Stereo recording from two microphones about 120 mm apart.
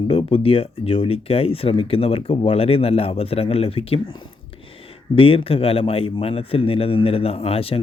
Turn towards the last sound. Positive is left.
turn(degrees=50)  # may be behind; listen again after turning